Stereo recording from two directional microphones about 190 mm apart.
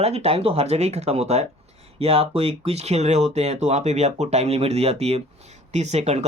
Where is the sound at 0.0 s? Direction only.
35° right (ahead or behind).